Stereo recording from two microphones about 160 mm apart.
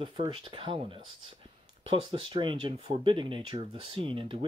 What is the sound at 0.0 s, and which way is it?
Speech, 30° right (ahead or behind).